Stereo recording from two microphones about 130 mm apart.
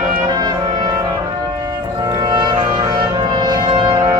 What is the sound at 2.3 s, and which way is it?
Music, 35° right (ahead or behind).